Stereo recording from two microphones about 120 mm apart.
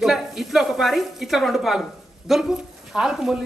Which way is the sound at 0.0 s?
5° right (ahead or behind).